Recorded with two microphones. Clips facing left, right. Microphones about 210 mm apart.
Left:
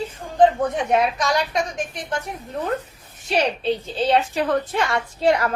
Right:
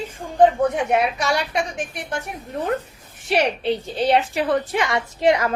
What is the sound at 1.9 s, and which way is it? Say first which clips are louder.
Speech: left 1 dB; 10° right (ahead or behind).